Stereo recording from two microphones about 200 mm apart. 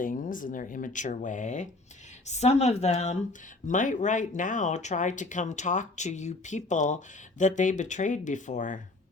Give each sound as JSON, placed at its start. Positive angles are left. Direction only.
{"t": 0.0, "sound": "speech", "side_deg": 40}